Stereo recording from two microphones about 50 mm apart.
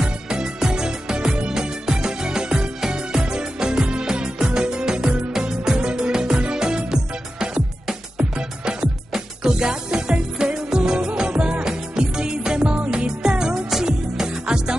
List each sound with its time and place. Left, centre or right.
0.0 s music: centre
9.1 s music: centre